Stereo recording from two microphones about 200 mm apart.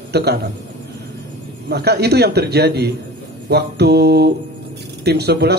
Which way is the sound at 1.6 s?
55° right (ahead or behind).